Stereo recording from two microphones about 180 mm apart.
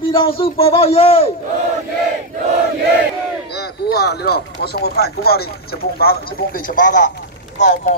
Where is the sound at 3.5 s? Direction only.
65° left (ahead or behind).